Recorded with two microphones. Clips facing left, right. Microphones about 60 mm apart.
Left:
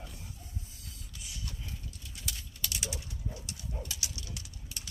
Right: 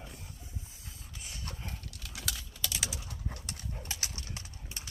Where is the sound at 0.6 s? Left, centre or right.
Right.